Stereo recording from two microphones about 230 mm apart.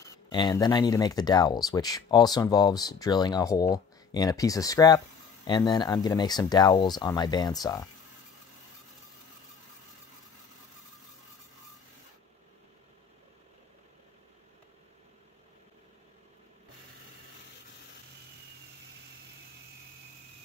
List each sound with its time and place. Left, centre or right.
0.3 s speech: centre